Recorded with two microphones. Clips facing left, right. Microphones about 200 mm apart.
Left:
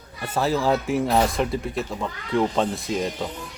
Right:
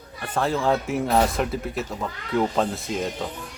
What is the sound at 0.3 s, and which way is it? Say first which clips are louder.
A man's voice: left 1 dB; 5° left (ahead or behind).